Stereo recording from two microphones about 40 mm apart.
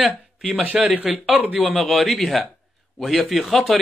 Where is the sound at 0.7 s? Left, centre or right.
Centre.